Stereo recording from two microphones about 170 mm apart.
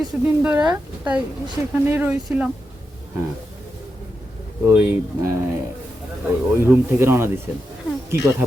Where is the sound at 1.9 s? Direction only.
10° right (ahead or behind).